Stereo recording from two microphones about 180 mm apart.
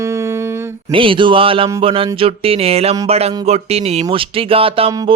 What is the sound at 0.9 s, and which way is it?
Speech, 30° right (ahead or behind).